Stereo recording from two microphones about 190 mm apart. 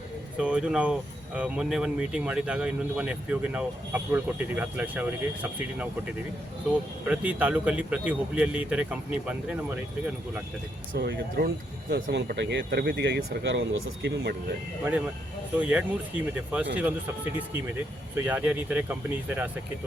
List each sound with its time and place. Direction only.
0.3 s speech: 5° right (ahead or behind)
7.0 s speech: 5° right (ahead or behind)
10.9 s speech: 60° right (ahead or behind)
15.5 s speech: 5° right (ahead or behind)
18.3 s speech: 10° right (ahead or behind)